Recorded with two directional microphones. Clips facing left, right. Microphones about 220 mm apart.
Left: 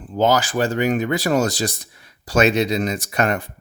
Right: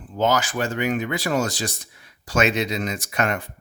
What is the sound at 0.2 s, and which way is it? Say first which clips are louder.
Speech: left 4 dB; 35° left (ahead or behind).